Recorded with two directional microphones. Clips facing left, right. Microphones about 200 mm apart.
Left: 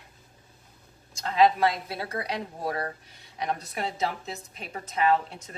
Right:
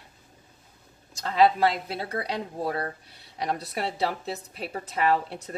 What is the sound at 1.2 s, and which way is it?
A woman's voice, 30° right (ahead or behind).